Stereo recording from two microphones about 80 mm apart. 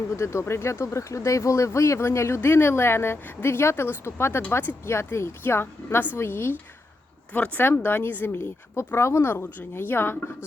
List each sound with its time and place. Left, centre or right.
0.2 s speech: left